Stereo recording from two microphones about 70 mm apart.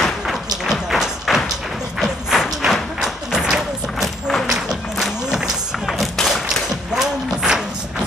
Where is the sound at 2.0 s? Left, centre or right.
Centre.